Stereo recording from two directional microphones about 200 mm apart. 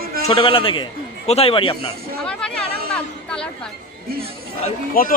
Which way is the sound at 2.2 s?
5° left (ahead or behind).